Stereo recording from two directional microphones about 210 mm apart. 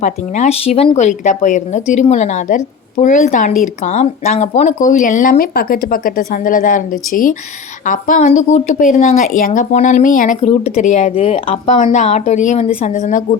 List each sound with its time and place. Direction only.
0.0 s speech: 30° left (ahead or behind)